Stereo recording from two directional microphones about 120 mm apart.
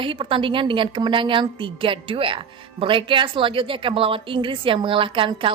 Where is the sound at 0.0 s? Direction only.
45° right (ahead or behind).